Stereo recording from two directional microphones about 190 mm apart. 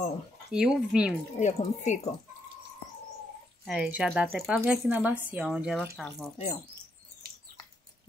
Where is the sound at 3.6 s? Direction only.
5° right (ahead or behind).